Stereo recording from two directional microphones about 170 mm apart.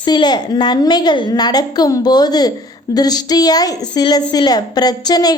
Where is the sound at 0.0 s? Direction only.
25° left (ahead or behind).